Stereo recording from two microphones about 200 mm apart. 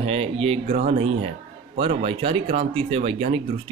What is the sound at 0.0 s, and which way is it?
Speech, 30° right (ahead or behind).